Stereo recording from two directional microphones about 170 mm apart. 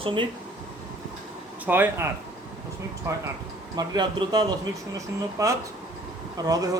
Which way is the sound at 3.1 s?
15° right (ahead or behind).